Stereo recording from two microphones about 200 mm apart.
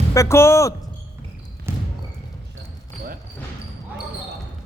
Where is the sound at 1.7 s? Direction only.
10° right (ahead or behind).